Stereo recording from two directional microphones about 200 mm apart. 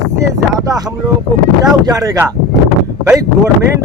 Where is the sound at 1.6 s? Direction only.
15° right (ahead or behind).